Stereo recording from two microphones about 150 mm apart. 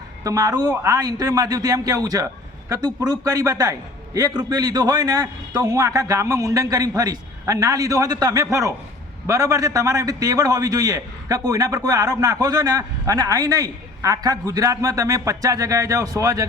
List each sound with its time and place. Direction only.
0.3 s a man's voice: 25° right (ahead or behind)